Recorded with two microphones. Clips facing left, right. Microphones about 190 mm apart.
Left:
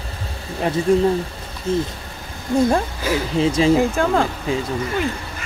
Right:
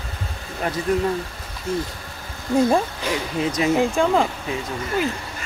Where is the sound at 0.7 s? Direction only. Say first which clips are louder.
Left 5 dB; 25° left (ahead or behind).